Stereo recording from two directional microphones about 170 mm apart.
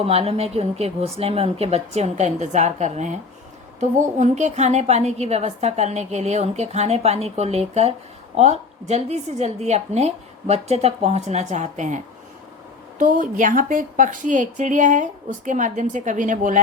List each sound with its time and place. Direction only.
0.0 s a woman's voice: 35° right (ahead or behind)